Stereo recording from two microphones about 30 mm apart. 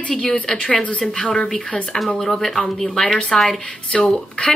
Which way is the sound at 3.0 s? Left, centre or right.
Left.